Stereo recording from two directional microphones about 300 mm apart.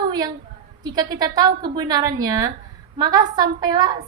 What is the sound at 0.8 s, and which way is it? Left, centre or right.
A woman's voice, centre.